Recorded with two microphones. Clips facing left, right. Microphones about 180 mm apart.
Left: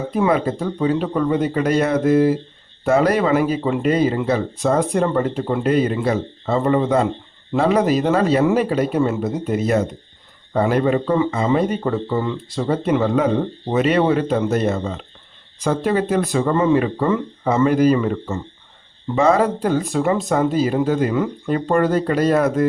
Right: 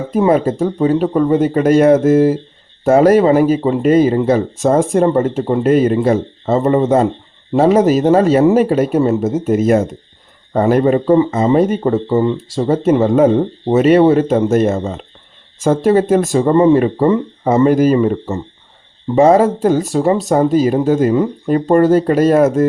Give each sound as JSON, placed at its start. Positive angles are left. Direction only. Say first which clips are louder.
{"t": 0.1, "sound": "speech", "louder": "right 6 dB", "side_deg": -40}